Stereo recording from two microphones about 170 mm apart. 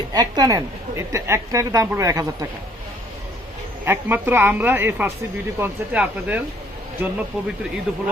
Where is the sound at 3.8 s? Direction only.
10° right (ahead or behind).